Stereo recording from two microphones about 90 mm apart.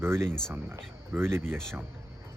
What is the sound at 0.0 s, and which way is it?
Speech, 30° right (ahead or behind).